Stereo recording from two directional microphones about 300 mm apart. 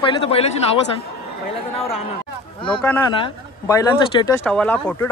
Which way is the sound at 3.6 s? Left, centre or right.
Centre.